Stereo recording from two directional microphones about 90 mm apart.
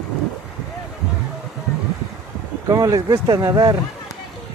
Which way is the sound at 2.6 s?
45° right (ahead or behind).